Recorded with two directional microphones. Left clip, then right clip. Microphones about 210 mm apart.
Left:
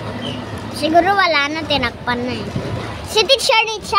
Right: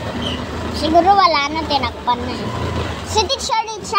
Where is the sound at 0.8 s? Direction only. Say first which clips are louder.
Right 2 dB; 20° left (ahead or behind); by 3.9 s 35° left (ahead or behind).